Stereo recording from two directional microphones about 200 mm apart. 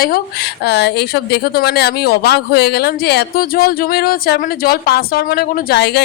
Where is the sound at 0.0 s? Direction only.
50° left (ahead or behind).